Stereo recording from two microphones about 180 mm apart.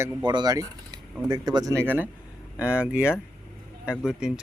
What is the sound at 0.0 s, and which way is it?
Speech, 25° right (ahead or behind).